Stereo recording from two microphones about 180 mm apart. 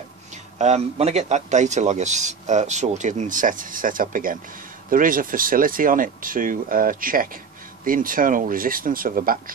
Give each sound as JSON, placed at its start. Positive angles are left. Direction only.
{"t": 0.6, "sound": "a man's voice", "side_deg": -35}